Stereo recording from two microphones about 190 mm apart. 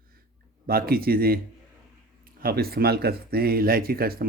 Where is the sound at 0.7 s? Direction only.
50° right (ahead or behind).